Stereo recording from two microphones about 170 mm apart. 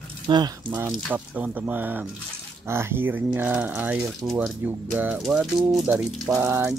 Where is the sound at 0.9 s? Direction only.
5° right (ahead or behind).